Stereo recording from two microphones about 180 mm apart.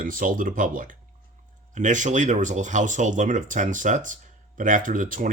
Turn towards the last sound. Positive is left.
turn(degrees=-45)  # may be behind; listen again after turning